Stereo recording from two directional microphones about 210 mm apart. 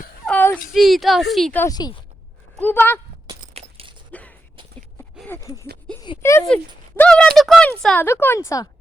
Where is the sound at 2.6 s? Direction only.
10° left (ahead or behind).